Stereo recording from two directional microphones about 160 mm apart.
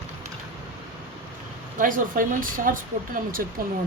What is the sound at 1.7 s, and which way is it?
Speech, 55° right (ahead or behind).